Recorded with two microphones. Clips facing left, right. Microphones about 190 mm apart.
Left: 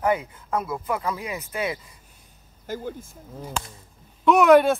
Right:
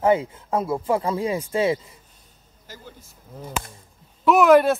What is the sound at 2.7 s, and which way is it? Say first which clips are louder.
Speech: left 12 dB; 50° left (ahead or behind).